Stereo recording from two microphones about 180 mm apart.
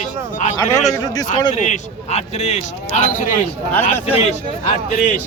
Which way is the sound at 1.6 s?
40° left (ahead or behind).